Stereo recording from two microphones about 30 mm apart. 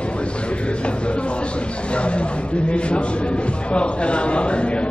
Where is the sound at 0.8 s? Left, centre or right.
Left.